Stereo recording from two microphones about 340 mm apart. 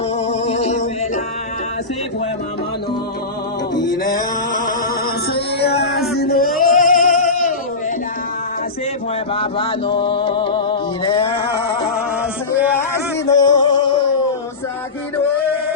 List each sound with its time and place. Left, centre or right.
0.3 s male singing: centre
5.3 s music: left
6.1 s male singing: left
9.3 s music: centre
13.2 s music: centre